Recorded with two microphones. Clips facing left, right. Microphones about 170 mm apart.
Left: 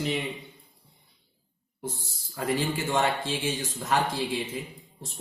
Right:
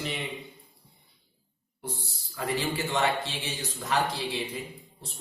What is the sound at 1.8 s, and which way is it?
A man's voice, 45° left (ahead or behind).